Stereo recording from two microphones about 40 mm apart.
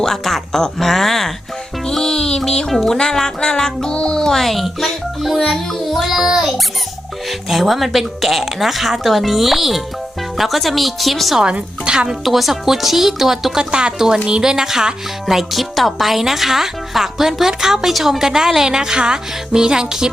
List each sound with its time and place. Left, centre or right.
0.0 s speech: centre
0.6 s music: centre
4.4 s speech: centre
11.9 s speech: centre
12.2 s speech: centre
13.6 s speech: right